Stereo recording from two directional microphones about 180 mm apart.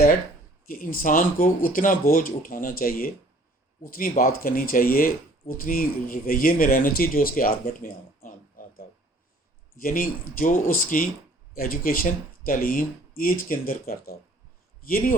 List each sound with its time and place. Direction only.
0.7 s speech: 50° left (ahead or behind)